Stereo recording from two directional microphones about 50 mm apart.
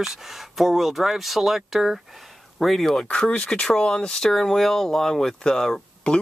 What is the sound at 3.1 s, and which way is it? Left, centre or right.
Speech, left.